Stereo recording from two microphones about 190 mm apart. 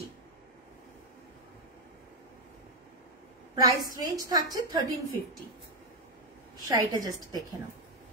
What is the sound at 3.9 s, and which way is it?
Speech, 20° right (ahead or behind).